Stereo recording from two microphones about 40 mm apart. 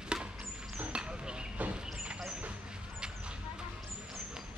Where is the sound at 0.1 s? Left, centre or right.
Centre.